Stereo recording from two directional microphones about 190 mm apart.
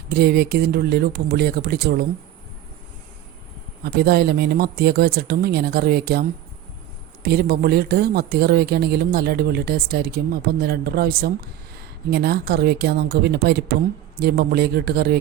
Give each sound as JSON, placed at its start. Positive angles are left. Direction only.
{"t": 0.1, "sound": "speech", "side_deg": -55}
{"t": 3.8, "sound": "speech", "side_deg": -60}